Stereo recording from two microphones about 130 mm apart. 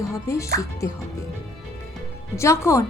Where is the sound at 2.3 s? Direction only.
20° left (ahead or behind).